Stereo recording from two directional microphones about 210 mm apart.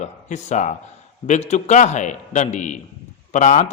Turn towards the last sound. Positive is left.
turn(degrees=35)  # may be behind; listen again after turning